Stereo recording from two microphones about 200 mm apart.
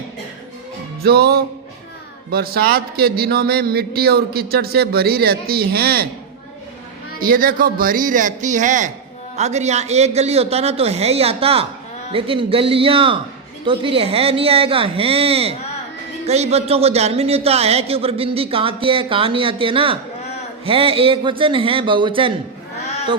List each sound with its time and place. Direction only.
1.0 s a man's voice: 50° right (ahead or behind)
7.2 s a man's voice: 45° right (ahead or behind); by 22.3 s 25° right (ahead or behind)